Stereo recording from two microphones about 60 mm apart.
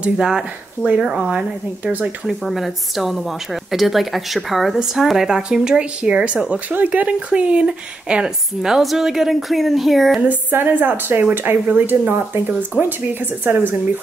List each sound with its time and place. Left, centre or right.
0.0 s speech: centre
2.2 s a woman's voice: centre
10.2 s a woman's voice: right